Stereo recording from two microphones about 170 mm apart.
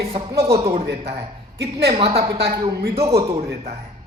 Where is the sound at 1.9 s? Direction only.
35° right (ahead or behind).